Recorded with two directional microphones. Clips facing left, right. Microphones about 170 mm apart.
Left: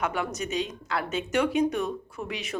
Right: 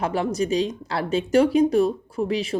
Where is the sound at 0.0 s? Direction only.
30° right (ahead or behind).